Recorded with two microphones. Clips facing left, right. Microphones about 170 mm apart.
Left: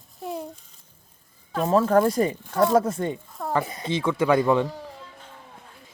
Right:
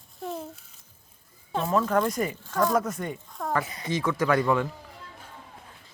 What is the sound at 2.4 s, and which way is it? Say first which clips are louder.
Speech: left 1 dB; 15° left (ahead or behind).